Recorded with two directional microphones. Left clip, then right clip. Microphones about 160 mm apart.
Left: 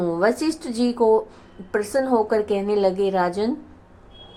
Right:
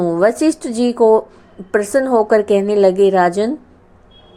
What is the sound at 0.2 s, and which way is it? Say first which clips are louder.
A woman's voice: right 8 dB; 30° right (ahead or behind).